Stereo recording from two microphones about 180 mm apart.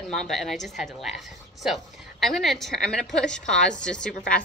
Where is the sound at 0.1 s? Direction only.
Centre (ahead or behind).